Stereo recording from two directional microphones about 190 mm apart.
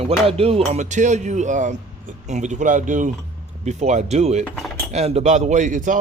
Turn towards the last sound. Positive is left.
turn(degrees=-40)  # may be behind; listen again after turning